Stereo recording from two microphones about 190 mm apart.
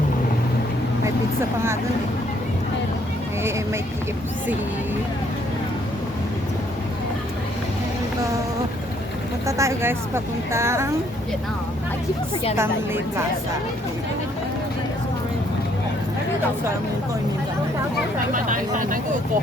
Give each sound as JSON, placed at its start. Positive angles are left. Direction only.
{"t": 9.5, "sound": "a woman's voice", "side_deg": -15}
{"t": 12.5, "sound": "a woman's voice", "side_deg": -15}
{"t": 18.4, "sound": "speech", "side_deg": -45}